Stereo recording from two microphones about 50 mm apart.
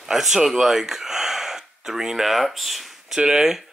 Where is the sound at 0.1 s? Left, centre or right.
Centre.